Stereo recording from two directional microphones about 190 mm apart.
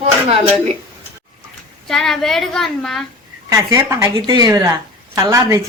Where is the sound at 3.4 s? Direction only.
15° right (ahead or behind).